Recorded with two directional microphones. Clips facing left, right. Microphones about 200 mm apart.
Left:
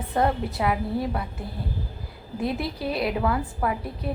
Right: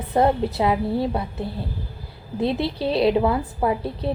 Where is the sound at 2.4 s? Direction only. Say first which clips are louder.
Right 5 dB; 30° right (ahead or behind).